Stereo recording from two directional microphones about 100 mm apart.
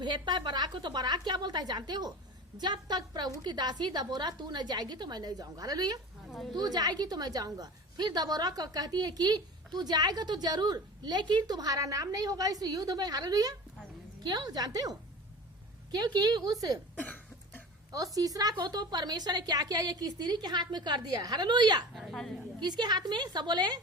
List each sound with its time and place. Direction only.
0.0 s a woman's voice: 50° right (ahead or behind)
6.3 s speech: centre (ahead or behind)
6.6 s a woman's voice: 40° right (ahead or behind)
17.0 s cough: 15° left (ahead or behind)
17.9 s a woman's voice: 35° right (ahead or behind)
21.9 s a woman's voice: centre (ahead or behind)
22.6 s a woman's voice: 45° right (ahead or behind)